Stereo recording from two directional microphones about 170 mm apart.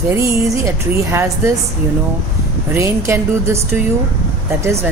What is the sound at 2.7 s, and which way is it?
Speech, 15° right (ahead or behind).